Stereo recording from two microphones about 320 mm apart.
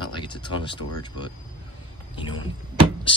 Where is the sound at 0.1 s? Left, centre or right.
Centre.